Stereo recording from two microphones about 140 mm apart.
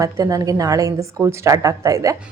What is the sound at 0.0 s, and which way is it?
A woman's voice, 25° right (ahead or behind).